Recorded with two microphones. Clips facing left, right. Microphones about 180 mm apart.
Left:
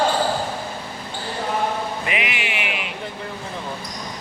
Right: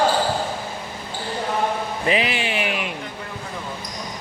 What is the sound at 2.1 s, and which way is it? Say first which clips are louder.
Music: right 5 dB; 35° right (ahead or behind).